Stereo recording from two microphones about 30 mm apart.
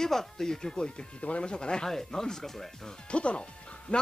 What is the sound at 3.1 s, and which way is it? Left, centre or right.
Speech, left.